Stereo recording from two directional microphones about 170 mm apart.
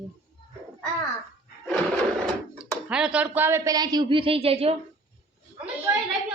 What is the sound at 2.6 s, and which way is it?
Speech, 5° right (ahead or behind).